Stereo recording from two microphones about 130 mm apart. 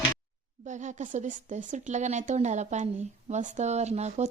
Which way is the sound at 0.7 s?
65° right (ahead or behind).